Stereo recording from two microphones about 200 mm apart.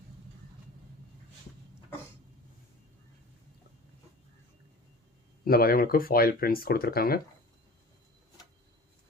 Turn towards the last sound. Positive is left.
turn(degrees=50)  # may be behind; listen again after turning